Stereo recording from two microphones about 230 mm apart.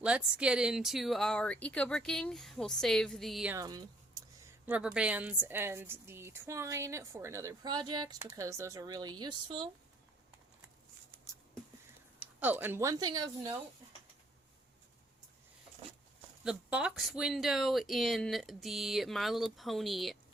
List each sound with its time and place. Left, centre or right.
0.0 s a woman's voice: centre
12.4 s a woman's voice: centre
16.4 s speech: centre